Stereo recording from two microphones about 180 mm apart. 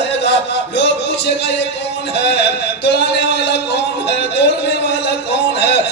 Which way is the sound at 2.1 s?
70° left (ahead or behind).